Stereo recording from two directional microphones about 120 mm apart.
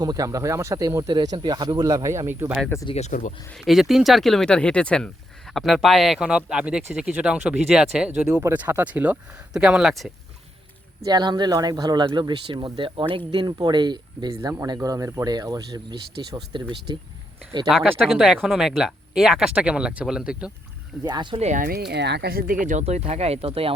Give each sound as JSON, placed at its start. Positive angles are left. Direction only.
{"t": 0.0, "sound": "speech", "side_deg": -30}
{"t": 2.9, "sound": "speech", "side_deg": 80}
{"t": 3.5, "sound": "speech", "side_deg": 0}
{"t": 11.0, "sound": "speech", "side_deg": -35}
{"t": 14.3, "sound": "speech", "side_deg": -25}
{"t": 18.0, "sound": "speech", "side_deg": -5}
{"t": 21.0, "sound": "speech", "side_deg": -40}
{"t": 21.3, "sound": "speech", "side_deg": -80}